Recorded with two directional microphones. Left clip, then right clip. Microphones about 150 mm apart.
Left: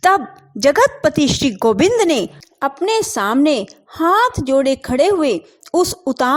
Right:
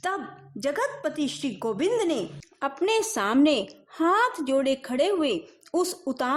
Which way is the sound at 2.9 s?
30° left (ahead or behind).